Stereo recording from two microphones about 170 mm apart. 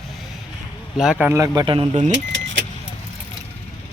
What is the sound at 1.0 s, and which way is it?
Speech, 5° right (ahead or behind).